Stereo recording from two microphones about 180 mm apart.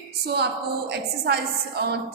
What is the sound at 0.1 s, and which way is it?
A woman's voice, 65° right (ahead or behind).